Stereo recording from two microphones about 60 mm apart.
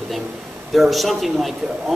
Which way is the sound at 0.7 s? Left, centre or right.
Centre.